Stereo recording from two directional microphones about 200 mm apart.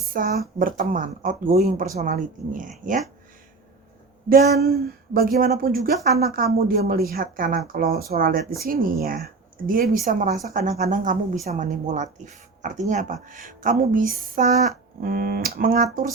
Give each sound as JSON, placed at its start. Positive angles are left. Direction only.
{"t": 0.1, "sound": "a woman's voice", "side_deg": -45}
{"t": 4.3, "sound": "speech", "side_deg": -50}